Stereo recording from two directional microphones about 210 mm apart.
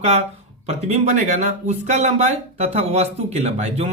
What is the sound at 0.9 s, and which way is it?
Speech, 35° right (ahead or behind).